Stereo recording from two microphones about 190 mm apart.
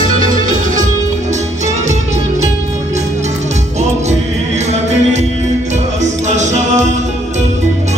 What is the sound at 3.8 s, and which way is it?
Music, 35° right (ahead or behind).